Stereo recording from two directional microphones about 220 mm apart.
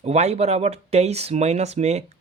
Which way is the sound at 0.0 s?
30° right (ahead or behind).